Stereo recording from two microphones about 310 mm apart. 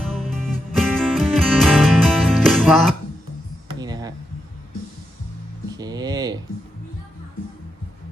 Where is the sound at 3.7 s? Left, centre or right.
Centre.